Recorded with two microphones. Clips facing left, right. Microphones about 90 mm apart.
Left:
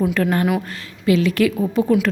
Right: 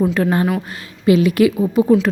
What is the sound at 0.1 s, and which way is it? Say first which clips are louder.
A woman's voice: right 1 dB; 15° right (ahead or behind).